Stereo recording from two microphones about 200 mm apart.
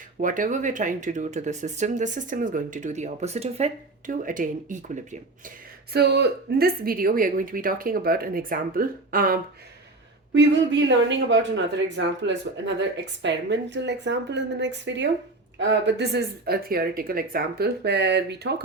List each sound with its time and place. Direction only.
0.2 s speech: 40° right (ahead or behind)
5.9 s speech: 55° right (ahead or behind)
10.3 s speech: 65° right (ahead or behind)